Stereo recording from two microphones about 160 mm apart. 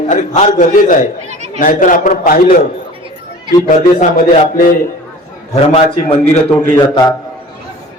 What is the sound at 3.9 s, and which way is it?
Speech, 65° left (ahead or behind).